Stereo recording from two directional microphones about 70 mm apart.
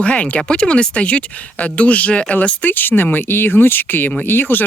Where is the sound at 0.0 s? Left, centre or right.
Centre.